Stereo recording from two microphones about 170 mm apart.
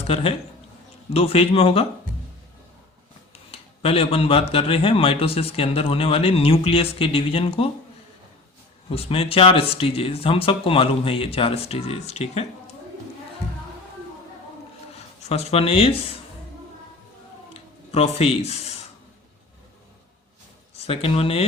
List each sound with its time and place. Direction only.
0.1 s speech: 35° left (ahead or behind)
3.3 s speech: 35° left (ahead or behind)
8.9 s speech: 35° left (ahead or behind)
14.9 s speech: 40° left (ahead or behind)
17.5 s a sound: 35° left (ahead or behind)
20.7 s speech: 35° left (ahead or behind)